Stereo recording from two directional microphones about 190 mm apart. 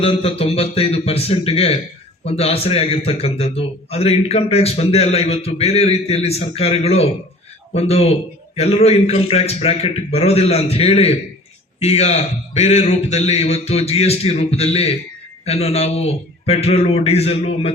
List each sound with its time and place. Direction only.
0.0 s a man's voice: 30° left (ahead or behind)